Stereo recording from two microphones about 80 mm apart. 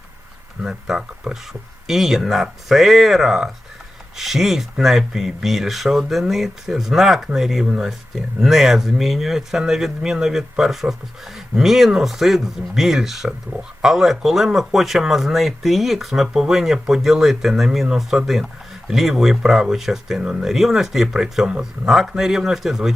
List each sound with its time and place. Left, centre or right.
0.6 s speech: centre